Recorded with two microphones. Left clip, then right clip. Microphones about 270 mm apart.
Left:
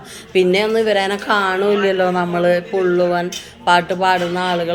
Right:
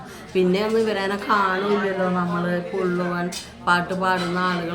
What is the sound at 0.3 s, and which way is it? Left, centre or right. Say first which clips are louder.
Speech: left 6 dB; centre.